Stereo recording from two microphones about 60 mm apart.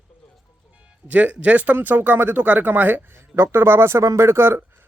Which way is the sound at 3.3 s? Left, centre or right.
Right.